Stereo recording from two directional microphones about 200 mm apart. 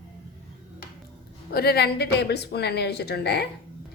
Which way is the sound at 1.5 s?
50° left (ahead or behind).